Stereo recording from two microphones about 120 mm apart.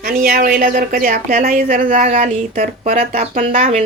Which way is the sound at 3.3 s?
90° right.